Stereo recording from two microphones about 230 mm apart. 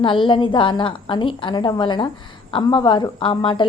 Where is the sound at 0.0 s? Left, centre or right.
Left.